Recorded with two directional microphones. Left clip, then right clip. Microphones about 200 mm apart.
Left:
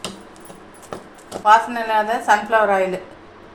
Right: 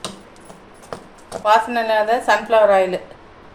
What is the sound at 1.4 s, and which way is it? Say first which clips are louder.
Speech: left 1 dB; 35° right (ahead or behind).